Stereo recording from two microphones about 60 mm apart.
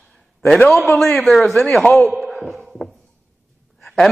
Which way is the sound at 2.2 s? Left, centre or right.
Centre.